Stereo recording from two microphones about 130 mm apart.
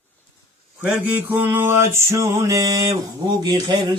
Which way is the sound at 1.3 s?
15° right (ahead or behind).